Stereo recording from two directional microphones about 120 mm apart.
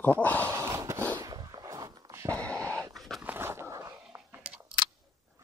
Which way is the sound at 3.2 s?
20° right (ahead or behind).